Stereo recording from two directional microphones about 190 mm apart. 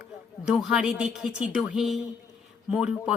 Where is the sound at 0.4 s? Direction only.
5° right (ahead or behind).